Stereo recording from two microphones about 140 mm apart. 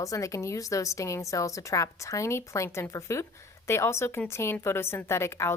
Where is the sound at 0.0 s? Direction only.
25° left (ahead or behind).